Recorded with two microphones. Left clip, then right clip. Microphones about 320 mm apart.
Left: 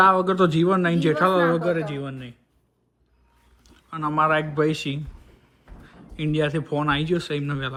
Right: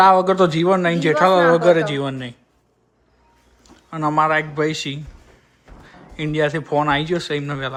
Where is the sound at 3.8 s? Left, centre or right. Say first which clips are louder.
Right 4 dB; centre.